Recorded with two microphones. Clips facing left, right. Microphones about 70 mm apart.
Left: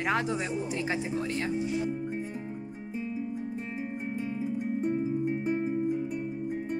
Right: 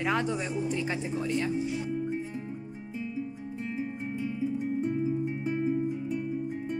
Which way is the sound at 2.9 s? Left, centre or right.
Left.